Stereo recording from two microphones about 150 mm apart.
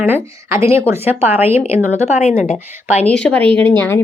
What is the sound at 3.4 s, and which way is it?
Speech, 35° right (ahead or behind).